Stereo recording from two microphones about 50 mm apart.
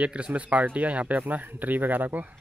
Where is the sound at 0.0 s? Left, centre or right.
Right.